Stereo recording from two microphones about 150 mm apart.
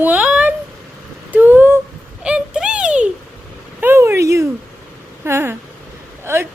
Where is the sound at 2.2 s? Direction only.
5° right (ahead or behind).